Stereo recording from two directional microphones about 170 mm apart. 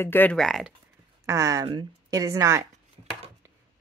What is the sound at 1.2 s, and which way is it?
A woman's voice, 20° right (ahead or behind).